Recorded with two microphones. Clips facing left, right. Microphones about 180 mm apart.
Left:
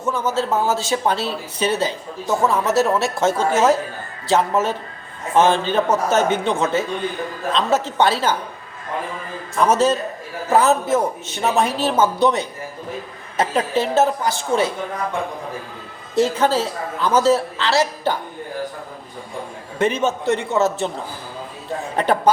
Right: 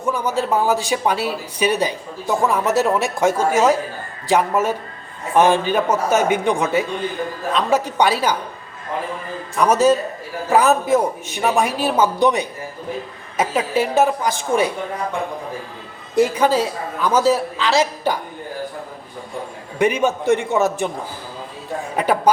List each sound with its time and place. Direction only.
0.0 s speech: 15° right (ahead or behind)
9.6 s speech: 10° right (ahead or behind)
16.1 s speech: 10° right (ahead or behind)
19.8 s speech: 15° right (ahead or behind)
21.9 s speech: 10° right (ahead or behind)